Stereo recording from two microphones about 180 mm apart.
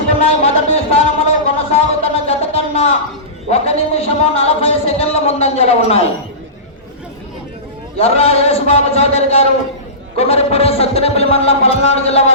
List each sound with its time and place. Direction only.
0.2 s music: 35° left (ahead or behind)
1.7 s a sound: 35° left (ahead or behind)
7.9 s speech: 35° left (ahead or behind)